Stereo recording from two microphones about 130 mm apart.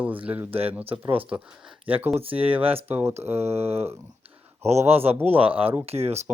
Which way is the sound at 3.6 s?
50° right (ahead or behind).